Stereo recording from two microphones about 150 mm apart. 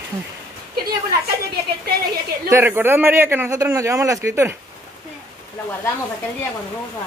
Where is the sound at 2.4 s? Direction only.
15° right (ahead or behind).